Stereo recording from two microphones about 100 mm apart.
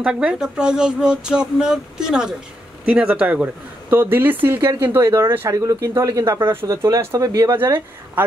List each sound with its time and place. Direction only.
0.0 s speech: 10° right (ahead or behind); by 7.7 s 25° right (ahead or behind)